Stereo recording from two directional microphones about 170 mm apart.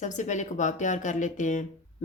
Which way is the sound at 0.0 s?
45° left (ahead or behind).